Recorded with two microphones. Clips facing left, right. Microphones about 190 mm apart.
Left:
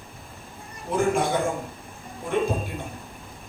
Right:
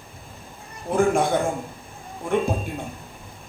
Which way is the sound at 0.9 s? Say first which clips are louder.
Right 4 dB; 55° right (ahead or behind).